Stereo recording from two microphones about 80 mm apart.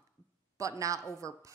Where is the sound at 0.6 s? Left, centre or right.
Right.